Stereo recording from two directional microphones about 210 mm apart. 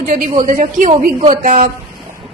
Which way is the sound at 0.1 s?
40° right (ahead or behind).